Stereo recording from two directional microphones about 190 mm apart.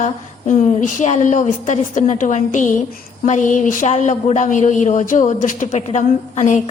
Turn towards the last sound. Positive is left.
turn(degrees=40)  # may be behind; listen again after turning